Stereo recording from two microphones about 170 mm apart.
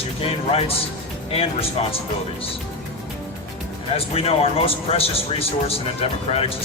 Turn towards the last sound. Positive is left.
turn(degrees=35)  # may be behind; listen again after turning